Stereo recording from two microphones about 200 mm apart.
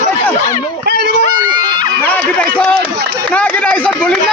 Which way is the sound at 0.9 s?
55° right (ahead or behind).